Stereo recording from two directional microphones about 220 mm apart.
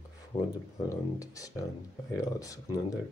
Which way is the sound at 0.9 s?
15° left (ahead or behind).